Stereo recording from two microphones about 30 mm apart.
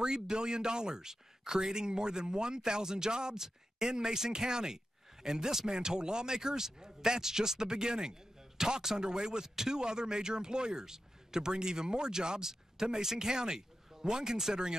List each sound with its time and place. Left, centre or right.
0.0 s speech: right